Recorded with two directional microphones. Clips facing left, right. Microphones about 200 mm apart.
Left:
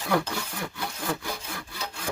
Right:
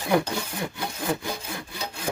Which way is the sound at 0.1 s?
20° right (ahead or behind).